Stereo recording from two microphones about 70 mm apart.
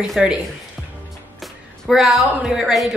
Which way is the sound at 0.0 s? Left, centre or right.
Centre.